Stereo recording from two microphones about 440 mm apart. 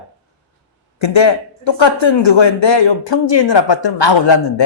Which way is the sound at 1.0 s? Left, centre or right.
Left.